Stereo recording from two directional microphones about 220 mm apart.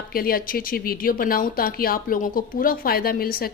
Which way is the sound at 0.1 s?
40° left (ahead or behind).